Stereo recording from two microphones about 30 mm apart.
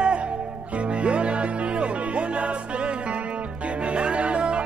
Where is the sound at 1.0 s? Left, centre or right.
Right.